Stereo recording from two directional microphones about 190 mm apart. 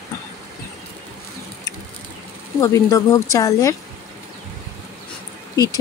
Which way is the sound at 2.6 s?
15° left (ahead or behind).